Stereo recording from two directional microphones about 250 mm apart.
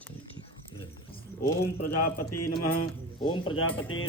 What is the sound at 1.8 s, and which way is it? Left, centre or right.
Speech, left.